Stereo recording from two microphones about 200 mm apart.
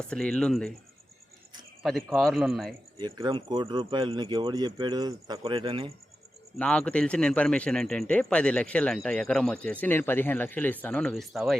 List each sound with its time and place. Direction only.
0.1 s speech: 5° left (ahead or behind)
1.8 s speech: centre (ahead or behind)
3.0 s speech: 20° right (ahead or behind)
6.6 s speech: 5° left (ahead or behind)